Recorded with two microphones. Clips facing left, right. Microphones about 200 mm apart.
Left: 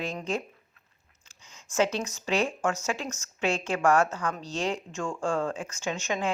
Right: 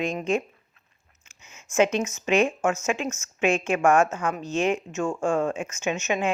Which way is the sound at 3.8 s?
25° right (ahead or behind).